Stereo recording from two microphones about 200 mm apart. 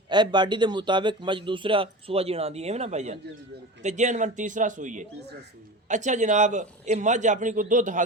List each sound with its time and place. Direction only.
0.1 s a man's voice: 20° right (ahead or behind); by 8.0 s 40° right (ahead or behind)